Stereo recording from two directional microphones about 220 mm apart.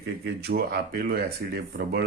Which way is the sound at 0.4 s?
45° right (ahead or behind).